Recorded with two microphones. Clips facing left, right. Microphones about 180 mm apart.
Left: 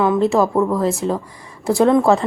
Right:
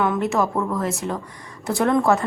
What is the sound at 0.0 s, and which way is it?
A woman's voice, 30° left (ahead or behind).